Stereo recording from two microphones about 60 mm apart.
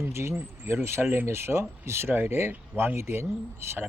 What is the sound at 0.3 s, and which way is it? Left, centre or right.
Speech, right.